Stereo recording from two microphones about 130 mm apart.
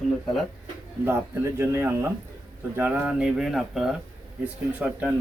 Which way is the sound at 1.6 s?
20° right (ahead or behind).